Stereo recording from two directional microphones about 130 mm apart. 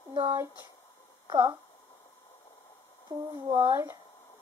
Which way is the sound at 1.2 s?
30° right (ahead or behind).